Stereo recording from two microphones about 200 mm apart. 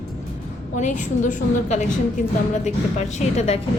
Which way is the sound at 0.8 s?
40° left (ahead or behind).